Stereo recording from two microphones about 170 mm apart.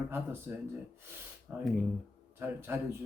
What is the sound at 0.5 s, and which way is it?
A man's voice, 10° right (ahead or behind).